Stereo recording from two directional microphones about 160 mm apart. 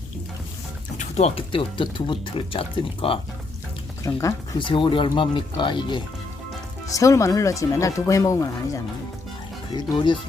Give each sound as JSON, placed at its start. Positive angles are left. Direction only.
{"t": 0.9, "sound": "speech", "side_deg": 40}
{"t": 4.0, "sound": "speech", "side_deg": 20}